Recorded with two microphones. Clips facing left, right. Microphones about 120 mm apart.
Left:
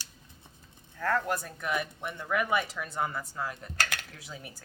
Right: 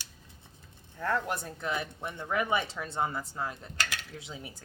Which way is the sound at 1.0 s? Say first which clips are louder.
Left 2 dB; 20° right (ahead or behind).